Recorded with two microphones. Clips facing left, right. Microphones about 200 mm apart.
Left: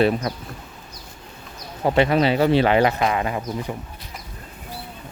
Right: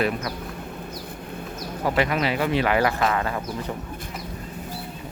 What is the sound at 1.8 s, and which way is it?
Speech, 30° left (ahead or behind).